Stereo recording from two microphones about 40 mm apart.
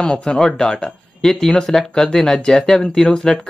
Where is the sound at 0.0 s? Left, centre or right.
Centre.